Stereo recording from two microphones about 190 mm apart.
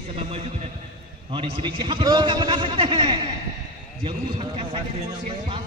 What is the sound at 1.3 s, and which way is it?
A man's voice, 25° right (ahead or behind).